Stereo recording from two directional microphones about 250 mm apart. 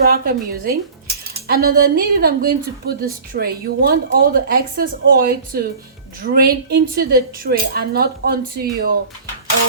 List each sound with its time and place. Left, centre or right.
0.0 s a woman's voice: right